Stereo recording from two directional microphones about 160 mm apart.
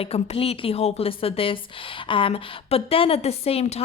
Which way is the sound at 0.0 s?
35° left (ahead or behind).